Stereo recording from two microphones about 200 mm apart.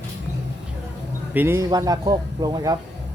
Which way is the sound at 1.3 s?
10° right (ahead or behind).